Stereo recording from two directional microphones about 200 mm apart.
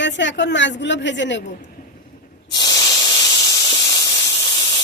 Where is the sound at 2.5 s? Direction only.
20° left (ahead or behind).